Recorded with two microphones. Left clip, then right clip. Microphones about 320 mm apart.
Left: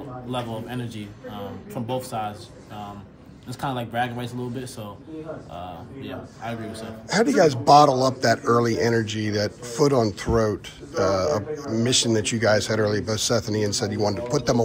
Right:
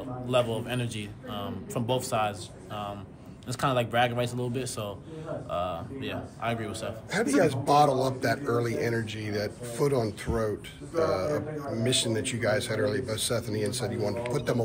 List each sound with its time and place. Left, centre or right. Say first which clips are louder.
0.3 s a man's voice: right 4 dB; centre
3.6 s a man's voice: right 1 dB; centre
5.6 s a man's voice: right 4 dB; centre
7.1 s a man's voice: left 7 dB; left